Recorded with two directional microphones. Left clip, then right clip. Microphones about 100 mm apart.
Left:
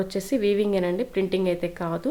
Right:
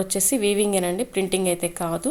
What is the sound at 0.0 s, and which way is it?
A woman's voice, 15° right (ahead or behind).